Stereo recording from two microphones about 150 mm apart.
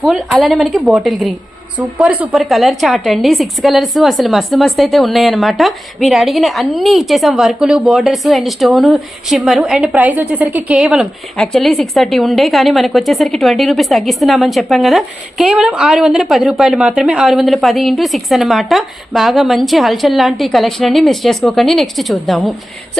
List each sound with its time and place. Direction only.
0.0 s a woman's voice: centre (ahead or behind)